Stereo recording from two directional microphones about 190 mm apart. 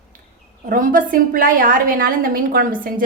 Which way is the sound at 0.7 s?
45° right (ahead or behind).